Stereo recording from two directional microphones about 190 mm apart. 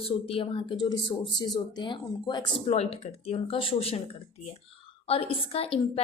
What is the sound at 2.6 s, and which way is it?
Speech, 35° left (ahead or behind).